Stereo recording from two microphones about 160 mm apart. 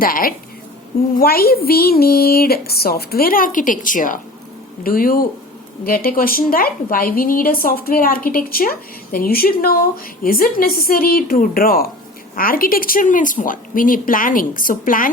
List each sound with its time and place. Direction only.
0.0 s a woman's voice: 65° left (ahead or behind)